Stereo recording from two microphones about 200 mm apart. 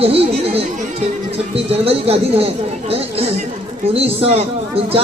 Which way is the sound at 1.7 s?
30° right (ahead or behind).